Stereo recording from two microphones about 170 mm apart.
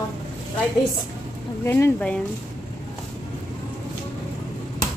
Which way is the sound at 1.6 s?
15° left (ahead or behind).